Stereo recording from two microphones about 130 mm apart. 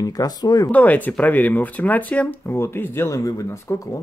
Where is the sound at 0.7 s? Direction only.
10° left (ahead or behind).